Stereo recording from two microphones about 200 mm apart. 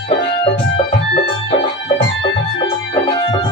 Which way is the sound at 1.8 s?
25° left (ahead or behind).